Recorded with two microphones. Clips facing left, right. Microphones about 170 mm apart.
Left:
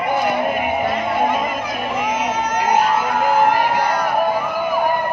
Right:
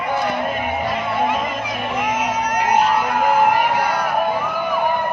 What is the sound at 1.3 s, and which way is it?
Music, 5° left (ahead or behind).